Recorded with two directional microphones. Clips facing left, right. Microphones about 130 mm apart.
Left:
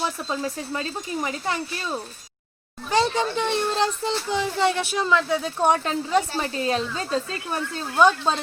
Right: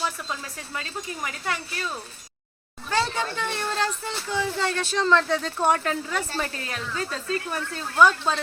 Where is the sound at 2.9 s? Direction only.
20° left (ahead or behind).